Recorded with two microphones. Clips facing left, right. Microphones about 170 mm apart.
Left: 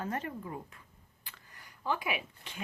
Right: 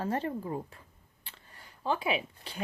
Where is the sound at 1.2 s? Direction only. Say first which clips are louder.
Right 2 dB; 30° right (ahead or behind).